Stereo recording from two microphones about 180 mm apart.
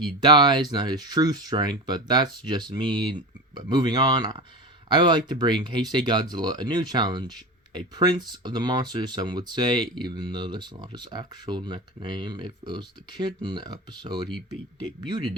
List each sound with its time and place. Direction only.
0.0 s speech: 25° right (ahead or behind)